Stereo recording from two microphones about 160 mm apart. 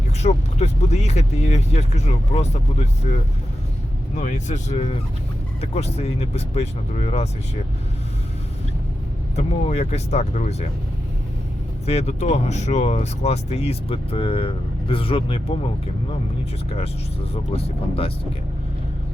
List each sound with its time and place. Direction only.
0.2 s speech: 45° left (ahead or behind)
4.2 s speech: 50° left (ahead or behind)
9.3 s speech: 45° left (ahead or behind)
11.9 s speech: 40° left (ahead or behind)
16.6 s speech: 40° left (ahead or behind)